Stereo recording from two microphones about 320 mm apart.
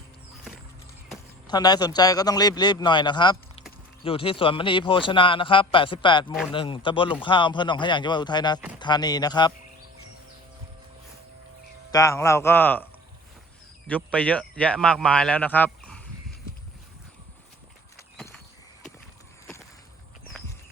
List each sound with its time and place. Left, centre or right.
1.5 s a man's voice: centre
11.9 s a man's voice: centre